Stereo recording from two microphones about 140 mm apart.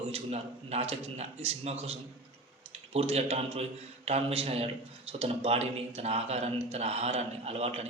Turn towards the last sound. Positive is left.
turn(degrees=-45)  # may be behind; listen again after turning